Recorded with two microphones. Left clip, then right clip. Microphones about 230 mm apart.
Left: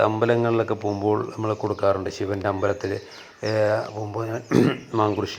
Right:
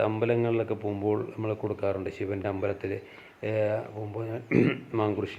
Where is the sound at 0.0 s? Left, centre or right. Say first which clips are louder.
Left 6 dB; centre.